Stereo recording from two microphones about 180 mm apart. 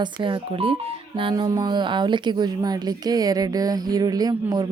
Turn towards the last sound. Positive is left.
turn(degrees=-20)  # may be behind; listen again after turning